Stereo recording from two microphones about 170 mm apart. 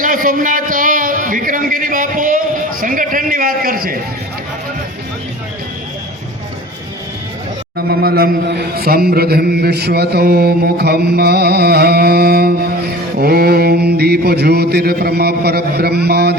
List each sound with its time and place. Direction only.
0.0 s a man's voice: 50° right (ahead or behind)
7.9 s a man's voice: 65° right (ahead or behind)